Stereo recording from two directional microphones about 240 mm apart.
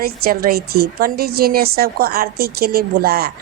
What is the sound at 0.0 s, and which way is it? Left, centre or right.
A woman's voice, right.